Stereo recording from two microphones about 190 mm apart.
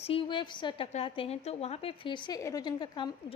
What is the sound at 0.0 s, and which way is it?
A woman's voice, 30° left (ahead or behind).